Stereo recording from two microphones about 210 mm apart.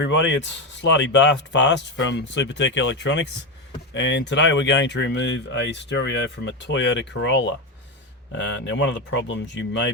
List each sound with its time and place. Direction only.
0.0 s speech: 60° left (ahead or behind)